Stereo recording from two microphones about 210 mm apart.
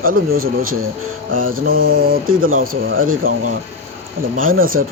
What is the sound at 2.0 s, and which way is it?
Speech, 45° right (ahead or behind).